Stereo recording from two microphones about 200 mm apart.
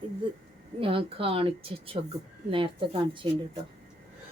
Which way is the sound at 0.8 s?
25° right (ahead or behind).